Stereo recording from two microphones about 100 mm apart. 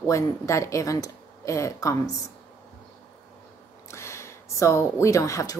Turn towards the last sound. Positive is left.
turn(degrees=35)  # may be behind; listen again after turning